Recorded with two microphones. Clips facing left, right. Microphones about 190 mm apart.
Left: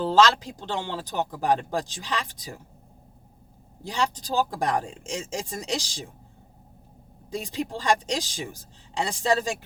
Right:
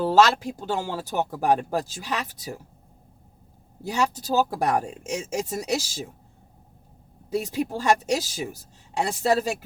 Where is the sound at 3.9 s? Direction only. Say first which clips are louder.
Right 3 dB; 10° right (ahead or behind).